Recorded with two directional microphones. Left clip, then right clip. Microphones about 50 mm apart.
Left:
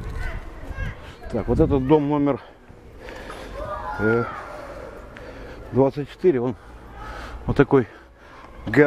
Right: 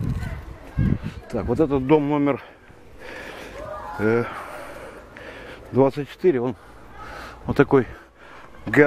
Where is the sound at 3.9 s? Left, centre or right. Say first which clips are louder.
Even; right.